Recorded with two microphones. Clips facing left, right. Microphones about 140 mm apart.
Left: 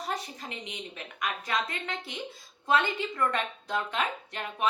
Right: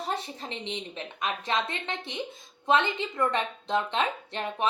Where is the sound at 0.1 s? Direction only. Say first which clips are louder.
Right 1 dB; 30° right (ahead or behind).